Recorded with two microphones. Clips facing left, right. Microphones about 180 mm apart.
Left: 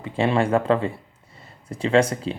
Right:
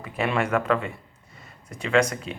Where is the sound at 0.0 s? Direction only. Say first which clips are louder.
Left 4 dB; 30° left (ahead or behind).